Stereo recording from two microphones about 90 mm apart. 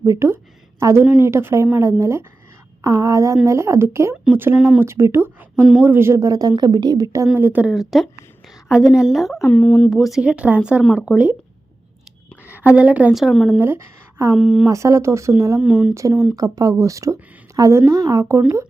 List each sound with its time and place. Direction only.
0.0 s speech: 35° right (ahead or behind)
4.1 s speech: 20° right (ahead or behind); by 7.3 s 40° right (ahead or behind)
7.3 s speech: 25° right (ahead or behind)
7.6 s a woman's voice: 5° right (ahead or behind)
9.5 s speech: 15° left (ahead or behind)
9.9 s speech: 5° right (ahead or behind)
12.5 s a woman's voice: 15° right (ahead or behind)
13.1 s a woman's voice: centre (ahead or behind)
13.6 s speech: 30° right (ahead or behind)
14.3 s speech: 10° right (ahead or behind)
14.7 s speech: 35° right (ahead or behind)
15.6 s speech: 20° right (ahead or behind)
16.0 s speech: 35° right (ahead or behind)